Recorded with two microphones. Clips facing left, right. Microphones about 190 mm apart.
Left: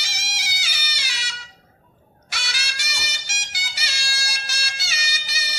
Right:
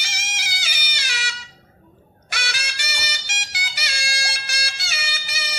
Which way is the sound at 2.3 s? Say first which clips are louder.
Right 3 dB; 55° right (ahead or behind).